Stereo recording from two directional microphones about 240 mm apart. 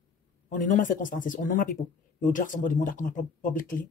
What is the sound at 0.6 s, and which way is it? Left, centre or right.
Speech, left.